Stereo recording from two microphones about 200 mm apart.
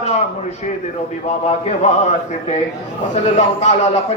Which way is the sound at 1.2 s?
35° left (ahead or behind).